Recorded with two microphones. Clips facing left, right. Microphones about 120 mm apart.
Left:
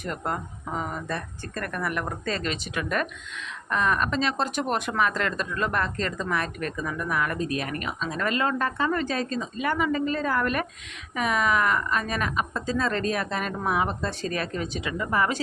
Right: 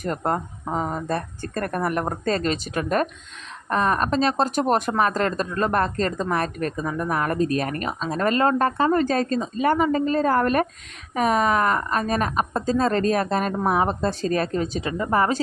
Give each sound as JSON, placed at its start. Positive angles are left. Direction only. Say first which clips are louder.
{"t": 0.0, "sound": "speech", "louder": "right 6 dB", "side_deg": -40}